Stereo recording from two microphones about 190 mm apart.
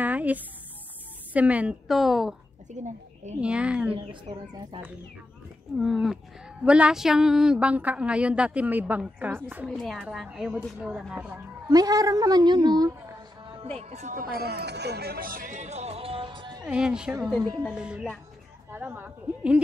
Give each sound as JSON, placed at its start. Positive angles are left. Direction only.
{"t": 0.0, "sound": "a sound", "side_deg": -10}
{"t": 1.3, "sound": "a woman's voice", "side_deg": -5}
{"t": 2.7, "sound": "a woman's voice", "side_deg": -40}
{"t": 3.3, "sound": "a woman's voice", "side_deg": -5}
{"t": 3.9, "sound": "a woman's voice", "side_deg": -25}
{"t": 5.8, "sound": "a woman's voice", "side_deg": 0}
{"t": 9.7, "sound": "a woman's voice", "side_deg": 0}
{"t": 11.7, "sound": "a woman's voice", "side_deg": -20}
{"t": 16.6, "sound": "a woman's voice", "side_deg": -5}